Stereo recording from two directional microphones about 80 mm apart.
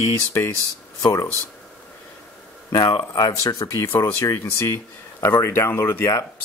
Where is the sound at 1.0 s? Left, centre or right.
Left.